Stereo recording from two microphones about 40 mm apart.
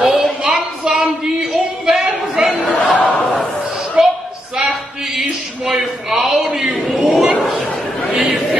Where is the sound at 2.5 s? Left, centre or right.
Left.